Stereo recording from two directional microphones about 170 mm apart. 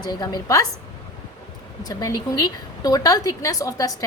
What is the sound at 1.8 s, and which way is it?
A woman's voice, 25° left (ahead or behind).